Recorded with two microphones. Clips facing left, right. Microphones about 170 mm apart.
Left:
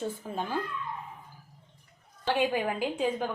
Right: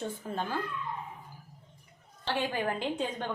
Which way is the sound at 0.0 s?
10° left (ahead or behind).